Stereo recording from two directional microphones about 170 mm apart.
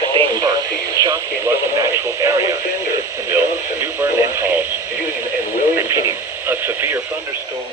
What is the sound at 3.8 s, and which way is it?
Radio, 15° right (ahead or behind).